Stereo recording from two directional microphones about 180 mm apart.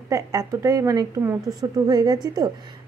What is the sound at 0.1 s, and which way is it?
A woman's voice, 15° right (ahead or behind).